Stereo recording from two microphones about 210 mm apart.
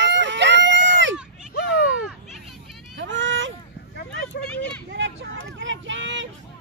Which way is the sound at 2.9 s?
60° right (ahead or behind).